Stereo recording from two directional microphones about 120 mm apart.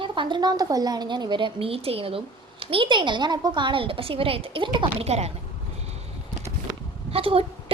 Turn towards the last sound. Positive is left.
turn(degrees=-50)  # may be behind; listen again after turning